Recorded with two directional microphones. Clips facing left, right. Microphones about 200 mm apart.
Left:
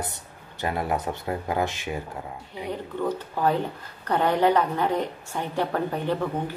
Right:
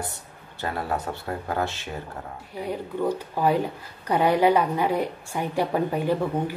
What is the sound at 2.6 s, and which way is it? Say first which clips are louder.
Speech: right 2 dB; 10° right (ahead or behind).